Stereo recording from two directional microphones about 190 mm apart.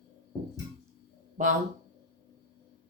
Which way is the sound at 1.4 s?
40° right (ahead or behind).